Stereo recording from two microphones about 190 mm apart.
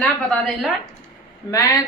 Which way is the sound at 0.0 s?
Centre (ahead or behind).